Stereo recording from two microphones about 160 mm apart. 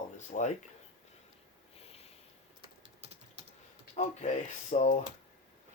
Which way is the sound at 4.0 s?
45° left (ahead or behind).